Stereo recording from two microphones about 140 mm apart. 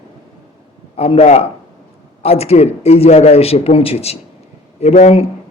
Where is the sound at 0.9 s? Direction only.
45° left (ahead or behind).